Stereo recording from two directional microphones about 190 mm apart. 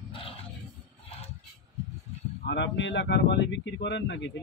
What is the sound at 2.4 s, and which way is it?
Speech, 65° left (ahead or behind).